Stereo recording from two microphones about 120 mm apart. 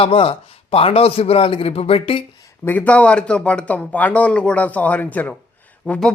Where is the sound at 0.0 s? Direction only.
50° left (ahead or behind).